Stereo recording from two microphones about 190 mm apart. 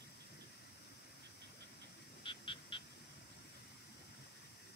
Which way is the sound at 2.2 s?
25° left (ahead or behind).